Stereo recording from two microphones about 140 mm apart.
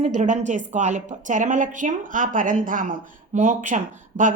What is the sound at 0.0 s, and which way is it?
A woman's voice, 60° right (ahead or behind).